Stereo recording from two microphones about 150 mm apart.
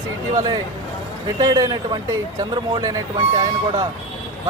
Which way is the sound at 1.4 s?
25° right (ahead or behind).